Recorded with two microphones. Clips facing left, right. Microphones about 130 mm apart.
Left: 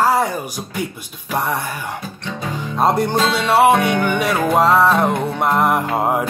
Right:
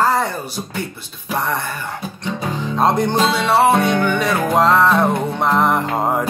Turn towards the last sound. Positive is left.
turn(degrees=5)  # may be behind; listen again after turning